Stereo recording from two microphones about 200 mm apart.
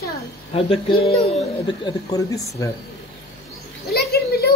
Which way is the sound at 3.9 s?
50° left (ahead or behind).